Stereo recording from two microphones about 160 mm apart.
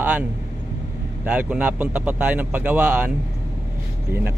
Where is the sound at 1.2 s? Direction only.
10° right (ahead or behind).